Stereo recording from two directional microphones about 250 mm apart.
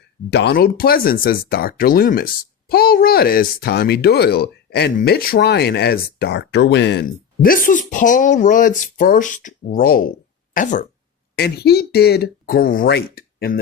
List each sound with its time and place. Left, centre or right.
0.3 s speech: left